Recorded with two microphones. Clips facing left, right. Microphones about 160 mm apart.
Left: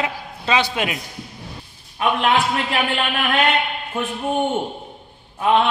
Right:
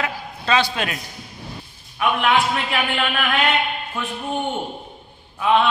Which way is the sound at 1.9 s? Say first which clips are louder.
Even; 30° left (ahead or behind).